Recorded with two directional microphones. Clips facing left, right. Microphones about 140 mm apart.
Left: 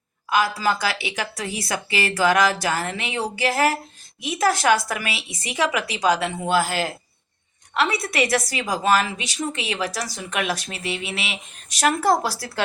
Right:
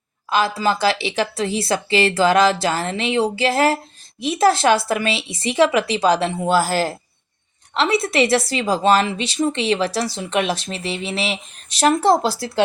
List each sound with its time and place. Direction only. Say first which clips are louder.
0.3 s a woman's voice: right 2 dB; 25° right (ahead or behind)
7.7 s a woman's voice: right 4 dB; 25° right (ahead or behind)